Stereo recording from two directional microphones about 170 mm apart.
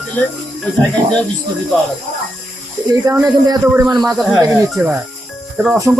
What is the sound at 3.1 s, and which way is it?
Speech, 20° right (ahead or behind).